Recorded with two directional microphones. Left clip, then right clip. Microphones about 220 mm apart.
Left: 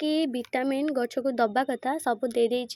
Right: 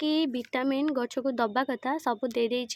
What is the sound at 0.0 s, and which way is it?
Speech, 5° left (ahead or behind).